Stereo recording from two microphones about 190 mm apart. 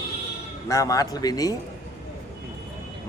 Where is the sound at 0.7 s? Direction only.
15° left (ahead or behind).